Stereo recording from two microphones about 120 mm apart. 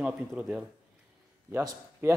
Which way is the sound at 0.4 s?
5° right (ahead or behind).